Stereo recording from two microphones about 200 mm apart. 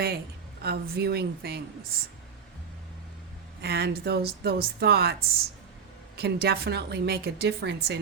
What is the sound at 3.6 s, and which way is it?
A woman's voice, 50° right (ahead or behind).